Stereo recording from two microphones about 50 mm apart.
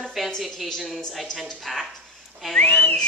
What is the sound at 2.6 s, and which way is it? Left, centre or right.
Speech, left.